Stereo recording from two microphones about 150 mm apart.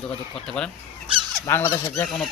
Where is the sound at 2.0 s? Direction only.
Centre (ahead or behind).